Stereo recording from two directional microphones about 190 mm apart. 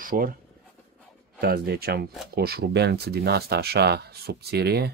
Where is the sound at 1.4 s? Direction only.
55° right (ahead or behind).